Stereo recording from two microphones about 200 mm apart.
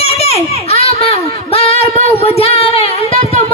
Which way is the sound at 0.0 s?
30° left (ahead or behind).